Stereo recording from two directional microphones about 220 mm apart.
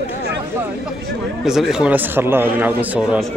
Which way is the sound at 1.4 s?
Centre (ahead or behind).